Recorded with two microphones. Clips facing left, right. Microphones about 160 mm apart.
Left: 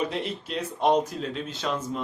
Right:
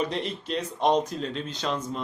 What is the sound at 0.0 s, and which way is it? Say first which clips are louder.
A man's voice: even; 5° left (ahead or behind).